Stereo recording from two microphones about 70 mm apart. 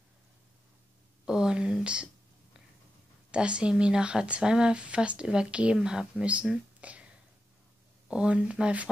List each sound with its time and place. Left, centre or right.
1.2 s speech: centre
3.3 s speech: centre
6.8 s a sound: centre
8.1 s speech: centre